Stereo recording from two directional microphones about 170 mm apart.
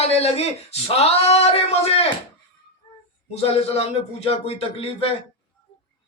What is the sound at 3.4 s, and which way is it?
A man's voice, 35° left (ahead or behind).